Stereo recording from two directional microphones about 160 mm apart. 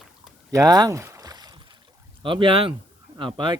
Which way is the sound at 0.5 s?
25° right (ahead or behind).